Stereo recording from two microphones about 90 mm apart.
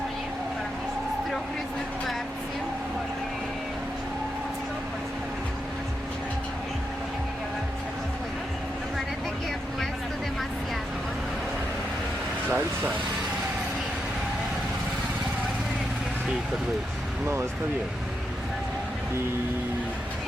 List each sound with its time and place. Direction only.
12.5 s speech: 20° right (ahead or behind)